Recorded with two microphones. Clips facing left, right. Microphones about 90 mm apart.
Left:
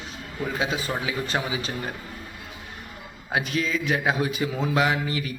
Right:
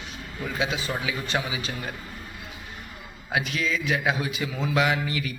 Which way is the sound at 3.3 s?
35° left (ahead or behind).